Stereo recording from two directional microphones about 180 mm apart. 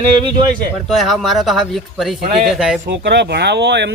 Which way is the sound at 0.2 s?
25° right (ahead or behind).